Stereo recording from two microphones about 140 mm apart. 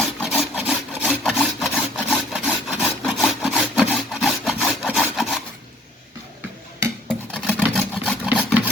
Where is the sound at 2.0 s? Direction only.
5° right (ahead or behind).